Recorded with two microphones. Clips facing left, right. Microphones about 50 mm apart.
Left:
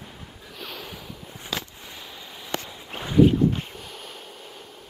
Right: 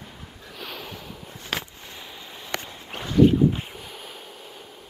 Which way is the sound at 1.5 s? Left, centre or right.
Right.